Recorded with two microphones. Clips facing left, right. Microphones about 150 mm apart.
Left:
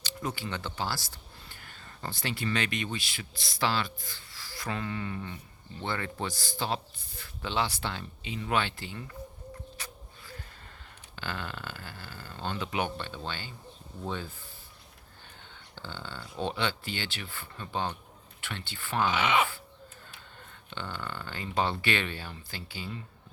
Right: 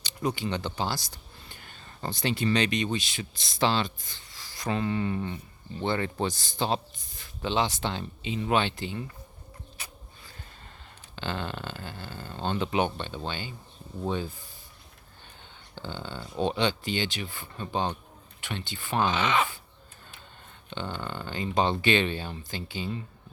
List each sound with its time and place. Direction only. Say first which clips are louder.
0.0 s speech: right 6 dB; 15° right (ahead or behind)
9.8 s a sound: left 1 dB; 10° right (ahead or behind)
11.1 s speech: right 4 dB; 25° right (ahead or behind)
15.7 s speech: right 5 dB; 15° right (ahead or behind)
19.1 s speech: right 1 dB; 10° left (ahead or behind)
20.7 s speech: right 4 dB; 20° right (ahead or behind)